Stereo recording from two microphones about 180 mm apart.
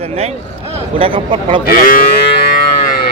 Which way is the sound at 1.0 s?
30° right (ahead or behind).